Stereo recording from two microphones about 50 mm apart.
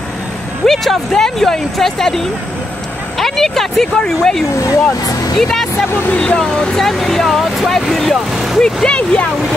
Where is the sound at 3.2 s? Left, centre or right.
Centre.